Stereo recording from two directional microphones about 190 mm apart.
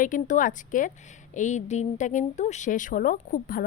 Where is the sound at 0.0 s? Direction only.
45° left (ahead or behind).